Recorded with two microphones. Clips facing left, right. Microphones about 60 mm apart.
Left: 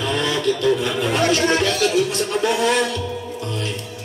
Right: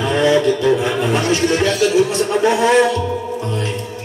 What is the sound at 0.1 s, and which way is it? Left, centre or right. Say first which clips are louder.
Music: right 8 dB; right.